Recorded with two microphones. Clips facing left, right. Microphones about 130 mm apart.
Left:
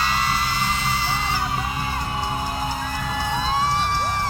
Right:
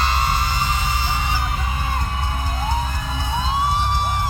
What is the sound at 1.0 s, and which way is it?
Music, 15° right (ahead or behind).